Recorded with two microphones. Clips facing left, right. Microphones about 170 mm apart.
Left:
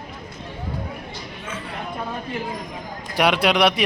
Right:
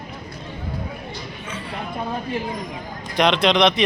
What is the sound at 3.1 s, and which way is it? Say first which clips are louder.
Speech: right 1 dB; 10° left (ahead or behind).